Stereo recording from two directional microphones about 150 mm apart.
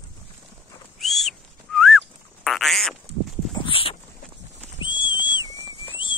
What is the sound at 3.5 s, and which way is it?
Dog, 35° left (ahead or behind).